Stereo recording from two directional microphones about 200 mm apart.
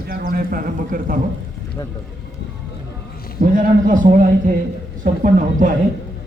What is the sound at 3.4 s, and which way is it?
A man's voice, 45° right (ahead or behind).